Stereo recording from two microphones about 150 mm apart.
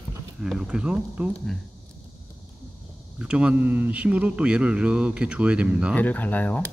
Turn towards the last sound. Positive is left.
turn(degrees=10)  # may be behind; listen again after turning